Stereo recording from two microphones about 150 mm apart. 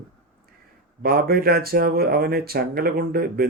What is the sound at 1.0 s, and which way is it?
Speech, 85° right.